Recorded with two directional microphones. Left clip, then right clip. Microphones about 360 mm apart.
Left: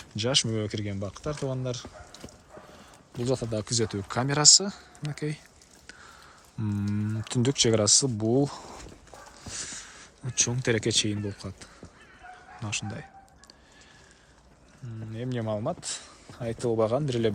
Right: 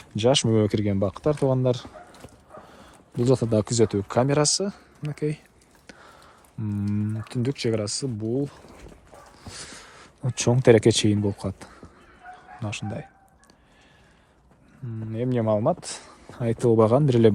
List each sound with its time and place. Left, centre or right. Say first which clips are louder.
0.2 s speech: right 6 dB; centre
6.6 s speech: right 3 dB; centre
9.4 s speech: left 2 dB; centre
15.1 s speech: right 8 dB; centre